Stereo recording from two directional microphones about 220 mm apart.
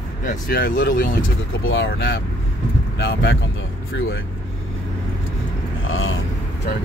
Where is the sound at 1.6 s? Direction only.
60° left (ahead or behind).